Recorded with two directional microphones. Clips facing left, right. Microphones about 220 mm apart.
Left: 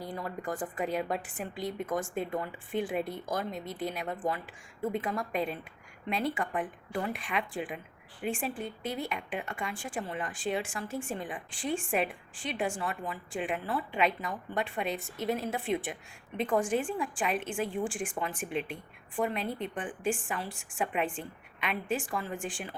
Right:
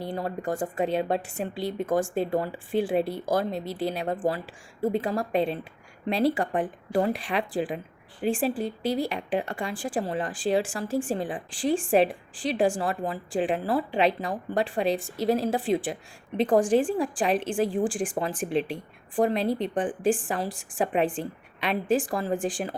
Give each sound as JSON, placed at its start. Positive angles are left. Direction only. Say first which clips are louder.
{"t": 0.0, "sound": "speech", "louder": "right 6 dB", "side_deg": -30}